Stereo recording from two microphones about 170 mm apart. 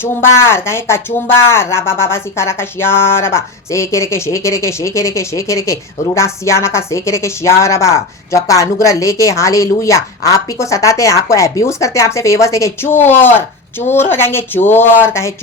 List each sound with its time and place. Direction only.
0.0 s a woman's voice: 15° left (ahead or behind)